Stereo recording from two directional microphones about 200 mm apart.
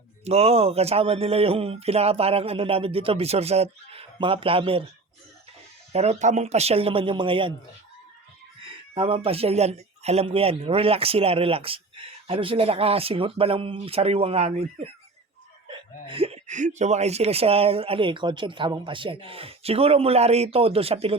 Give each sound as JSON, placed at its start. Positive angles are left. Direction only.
{"t": 0.3, "sound": "a man's voice", "side_deg": -30}
{"t": 5.9, "sound": "a man's voice", "side_deg": -35}
{"t": 9.0, "sound": "a man's voice", "side_deg": -30}
{"t": 15.7, "sound": "a man's voice", "side_deg": -25}